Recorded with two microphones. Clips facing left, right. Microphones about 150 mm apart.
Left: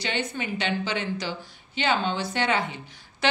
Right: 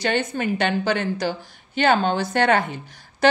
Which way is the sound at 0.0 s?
45° right (ahead or behind).